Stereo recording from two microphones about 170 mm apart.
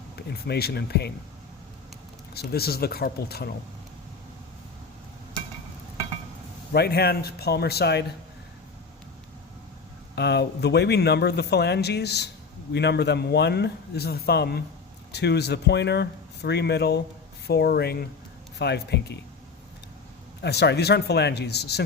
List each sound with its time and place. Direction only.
0.2 s speech: 75° left (ahead or behind)
2.3 s speech: 70° left (ahead or behind)
6.7 s speech: 70° left (ahead or behind)
10.2 s speech: 80° left
20.4 s speech: 75° left (ahead or behind)